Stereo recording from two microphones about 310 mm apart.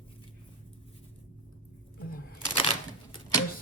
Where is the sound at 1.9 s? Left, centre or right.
Left.